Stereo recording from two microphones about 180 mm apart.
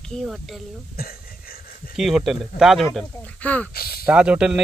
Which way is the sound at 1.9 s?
5° right (ahead or behind).